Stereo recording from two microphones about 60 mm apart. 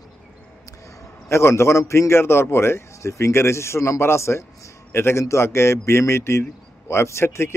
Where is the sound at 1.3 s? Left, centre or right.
Left.